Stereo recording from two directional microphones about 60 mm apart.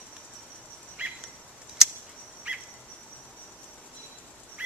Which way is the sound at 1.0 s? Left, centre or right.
Right.